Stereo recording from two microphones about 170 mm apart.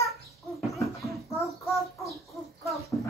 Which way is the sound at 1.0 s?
Centre (ahead or behind).